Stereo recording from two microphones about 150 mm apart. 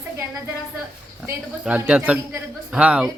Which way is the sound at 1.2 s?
10° right (ahead or behind).